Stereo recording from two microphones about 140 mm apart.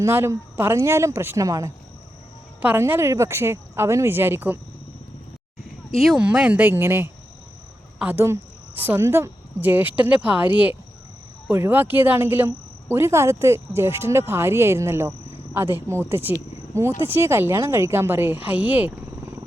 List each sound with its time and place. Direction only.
0.0 s speech: 20° right (ahead or behind)
6.0 s a woman's voice: 5° right (ahead or behind)